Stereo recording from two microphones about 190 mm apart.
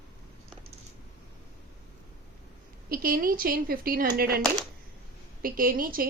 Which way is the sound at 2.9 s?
50° right (ahead or behind).